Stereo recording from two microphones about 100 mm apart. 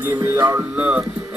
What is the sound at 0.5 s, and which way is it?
Speech, 10° right (ahead or behind).